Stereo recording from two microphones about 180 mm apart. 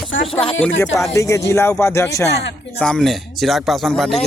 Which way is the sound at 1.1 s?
15° left (ahead or behind).